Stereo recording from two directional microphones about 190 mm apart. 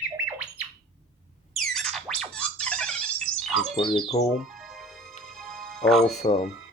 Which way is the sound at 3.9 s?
30° left (ahead or behind).